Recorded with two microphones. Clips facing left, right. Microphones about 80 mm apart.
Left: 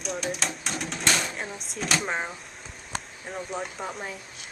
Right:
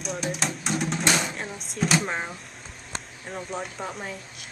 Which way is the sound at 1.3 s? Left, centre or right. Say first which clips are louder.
Even; centre.